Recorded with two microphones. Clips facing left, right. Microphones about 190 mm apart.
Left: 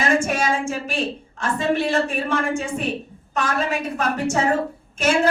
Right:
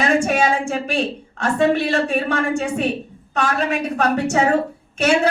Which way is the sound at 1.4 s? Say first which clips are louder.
Right 4 dB; 65° right (ahead or behind).